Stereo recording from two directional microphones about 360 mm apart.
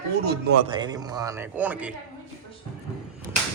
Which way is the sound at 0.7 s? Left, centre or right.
Centre.